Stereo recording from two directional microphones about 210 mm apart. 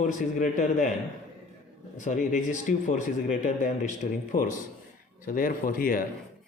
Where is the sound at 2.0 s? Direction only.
35° left (ahead or behind).